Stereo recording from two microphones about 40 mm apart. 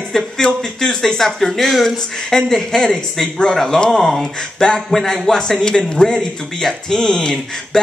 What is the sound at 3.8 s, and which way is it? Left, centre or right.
Speech, centre.